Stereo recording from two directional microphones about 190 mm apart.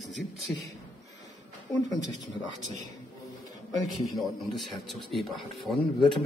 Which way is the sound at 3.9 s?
Centre (ahead or behind).